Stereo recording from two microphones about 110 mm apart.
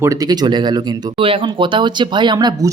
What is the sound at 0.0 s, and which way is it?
Speech, 30° right (ahead or behind).